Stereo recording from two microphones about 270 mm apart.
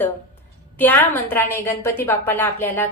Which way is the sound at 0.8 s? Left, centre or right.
Centre.